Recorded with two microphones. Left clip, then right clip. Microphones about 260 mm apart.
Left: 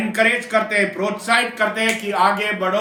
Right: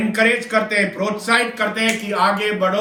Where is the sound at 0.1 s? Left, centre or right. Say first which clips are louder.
Even; centre.